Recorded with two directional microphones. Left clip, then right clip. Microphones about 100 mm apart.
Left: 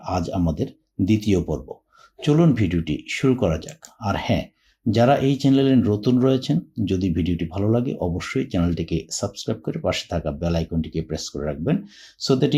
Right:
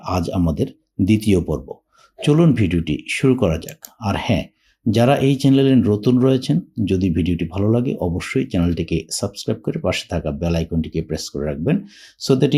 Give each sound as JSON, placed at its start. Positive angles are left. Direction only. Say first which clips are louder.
{"t": 0.0, "sound": "speech", "louder": "right 3 dB", "side_deg": -55}